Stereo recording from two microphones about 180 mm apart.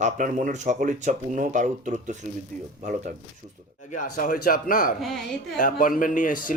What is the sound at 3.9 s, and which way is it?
A man's voice, 45° left (ahead or behind).